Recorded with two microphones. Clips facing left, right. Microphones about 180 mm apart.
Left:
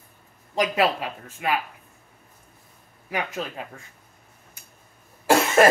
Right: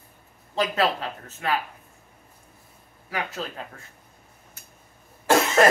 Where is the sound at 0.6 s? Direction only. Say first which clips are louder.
Left 2 dB; 10° left (ahead or behind).